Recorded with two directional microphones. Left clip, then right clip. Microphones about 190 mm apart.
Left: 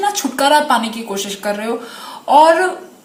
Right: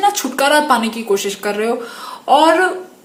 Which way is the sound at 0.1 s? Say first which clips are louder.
Left 1 dB; 35° right (ahead or behind).